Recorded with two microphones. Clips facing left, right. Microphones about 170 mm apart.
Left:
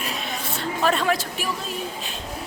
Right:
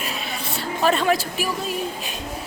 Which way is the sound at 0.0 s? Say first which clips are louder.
Even; 5° right (ahead or behind).